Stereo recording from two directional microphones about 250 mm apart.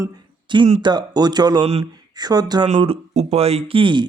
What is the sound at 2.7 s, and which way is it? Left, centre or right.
Speech, right.